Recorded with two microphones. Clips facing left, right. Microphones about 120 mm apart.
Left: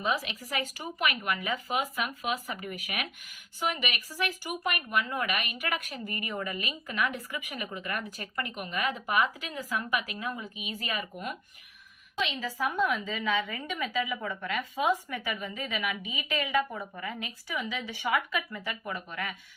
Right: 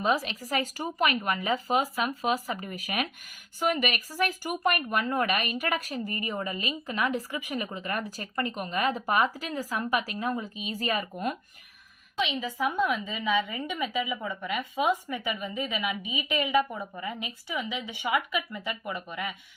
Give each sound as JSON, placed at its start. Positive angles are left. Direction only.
{"t": 0.0, "sound": "speech", "side_deg": -40}
{"t": 12.1, "sound": "a woman's voice", "side_deg": -15}